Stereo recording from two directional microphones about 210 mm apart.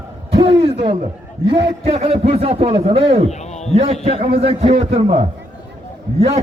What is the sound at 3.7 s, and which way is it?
A man's voice, 30° right (ahead or behind).